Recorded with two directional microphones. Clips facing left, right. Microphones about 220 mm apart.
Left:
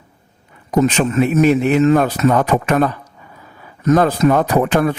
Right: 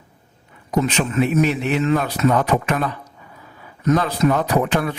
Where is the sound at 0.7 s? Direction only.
50° left (ahead or behind).